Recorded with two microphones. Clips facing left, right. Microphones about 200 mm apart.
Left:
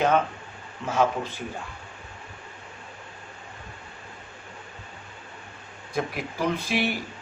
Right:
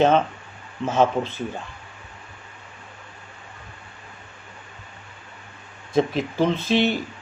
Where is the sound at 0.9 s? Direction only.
25° right (ahead or behind).